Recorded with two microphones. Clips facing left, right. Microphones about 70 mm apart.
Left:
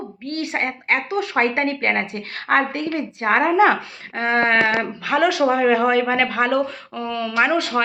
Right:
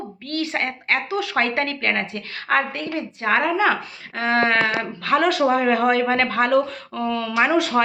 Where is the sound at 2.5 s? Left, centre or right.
Left.